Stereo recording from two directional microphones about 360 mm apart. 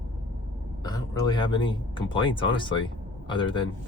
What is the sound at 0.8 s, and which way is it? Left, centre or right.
Speech, centre.